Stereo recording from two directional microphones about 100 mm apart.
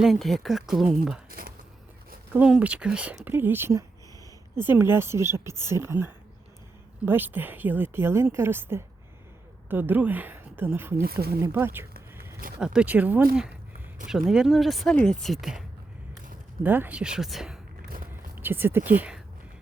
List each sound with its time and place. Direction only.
0.0 s speech: centre (ahead or behind)
2.3 s speech: 15° right (ahead or behind)
11.5 s a sound: 25° right (ahead or behind)
12.5 s speech: 10° right (ahead or behind)
16.6 s speech: 20° right (ahead or behind)
17.0 s speech: 5° right (ahead or behind)
18.1 s speech: 20° right (ahead or behind)